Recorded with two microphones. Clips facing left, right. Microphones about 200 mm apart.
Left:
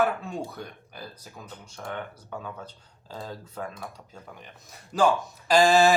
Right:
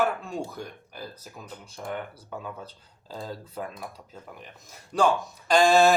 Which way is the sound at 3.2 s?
5° right (ahead or behind).